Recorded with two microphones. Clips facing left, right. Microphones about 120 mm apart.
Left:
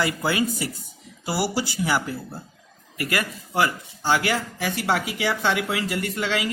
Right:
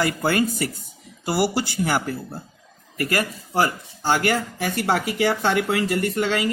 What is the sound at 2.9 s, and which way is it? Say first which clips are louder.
Speech: right 3 dB; 40° right (ahead or behind).